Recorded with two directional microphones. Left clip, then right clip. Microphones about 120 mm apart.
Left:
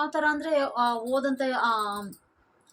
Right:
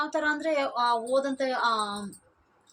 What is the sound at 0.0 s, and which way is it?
A woman's voice, 15° left (ahead or behind).